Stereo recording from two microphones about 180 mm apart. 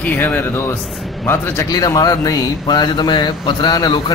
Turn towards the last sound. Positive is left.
turn(degrees=25)  # may be behind; listen again after turning